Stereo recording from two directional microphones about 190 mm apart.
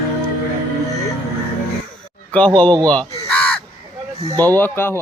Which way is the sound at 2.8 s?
5° left (ahead or behind).